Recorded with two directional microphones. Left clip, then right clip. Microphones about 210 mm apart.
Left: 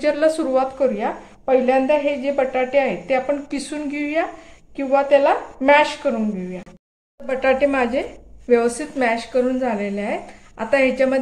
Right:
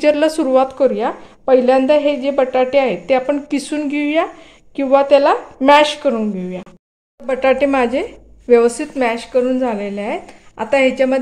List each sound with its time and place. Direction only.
0.0 s a woman's voice: 35° right (ahead or behind)